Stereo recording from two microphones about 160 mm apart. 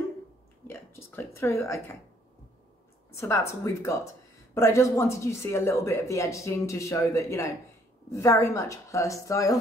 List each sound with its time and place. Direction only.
0.7 s speech: 15° left (ahead or behind)
3.1 s speech: 15° left (ahead or behind)